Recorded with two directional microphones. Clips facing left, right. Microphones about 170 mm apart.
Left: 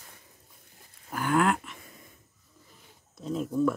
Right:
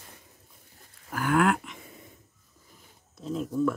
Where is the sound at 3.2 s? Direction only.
Centre (ahead or behind).